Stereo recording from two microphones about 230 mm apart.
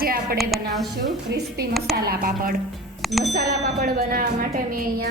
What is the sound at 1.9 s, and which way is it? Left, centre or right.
Speech, right.